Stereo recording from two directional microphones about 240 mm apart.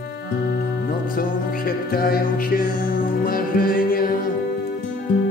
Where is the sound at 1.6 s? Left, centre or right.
Left.